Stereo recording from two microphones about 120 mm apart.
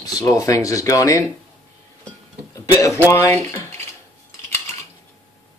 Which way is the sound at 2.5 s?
25° left (ahead or behind).